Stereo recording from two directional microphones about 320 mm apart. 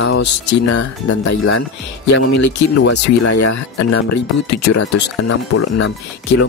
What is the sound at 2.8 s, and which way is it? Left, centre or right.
Speech, left.